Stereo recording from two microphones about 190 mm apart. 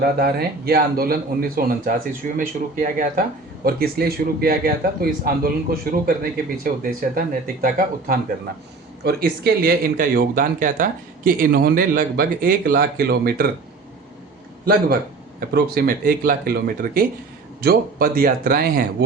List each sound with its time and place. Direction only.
0.0 s speech: 55° right (ahead or behind)
14.6 s speech: 50° right (ahead or behind)